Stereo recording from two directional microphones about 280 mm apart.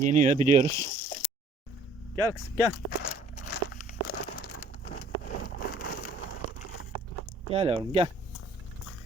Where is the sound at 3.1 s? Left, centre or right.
Left.